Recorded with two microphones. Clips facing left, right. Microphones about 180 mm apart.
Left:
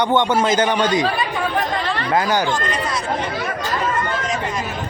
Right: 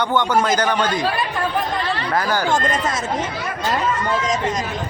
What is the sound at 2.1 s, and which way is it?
Speech, 20° left (ahead or behind).